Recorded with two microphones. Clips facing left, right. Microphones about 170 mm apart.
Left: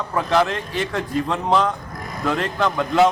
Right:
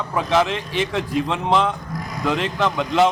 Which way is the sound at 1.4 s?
Centre (ahead or behind).